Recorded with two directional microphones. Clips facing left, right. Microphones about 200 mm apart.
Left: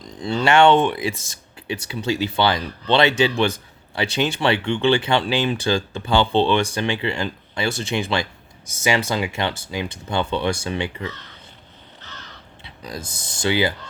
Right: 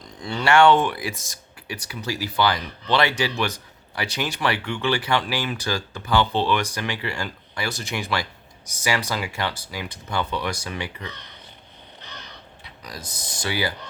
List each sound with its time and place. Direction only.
0.2 s speech: 25° left (ahead or behind)
11.0 s speech: 15° right (ahead or behind)
11.9 s crow: 15° right (ahead or behind)
12.6 s speech: 25° left (ahead or behind)